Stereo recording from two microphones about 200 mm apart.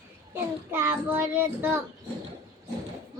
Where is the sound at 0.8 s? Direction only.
10° right (ahead or behind).